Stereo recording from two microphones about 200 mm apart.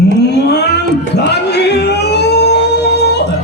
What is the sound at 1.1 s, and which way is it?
Music, 55° left (ahead or behind).